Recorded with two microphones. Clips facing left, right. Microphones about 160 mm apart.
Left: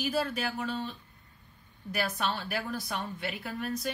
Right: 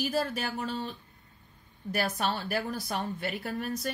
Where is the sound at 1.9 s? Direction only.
45° right (ahead or behind).